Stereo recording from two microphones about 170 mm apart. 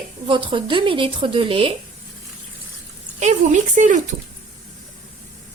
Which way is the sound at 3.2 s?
45° right (ahead or behind).